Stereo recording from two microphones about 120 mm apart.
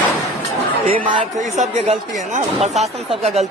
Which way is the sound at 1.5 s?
75° right (ahead or behind).